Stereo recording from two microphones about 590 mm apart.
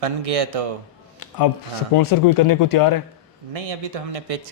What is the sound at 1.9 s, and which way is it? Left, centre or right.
A man's voice, left.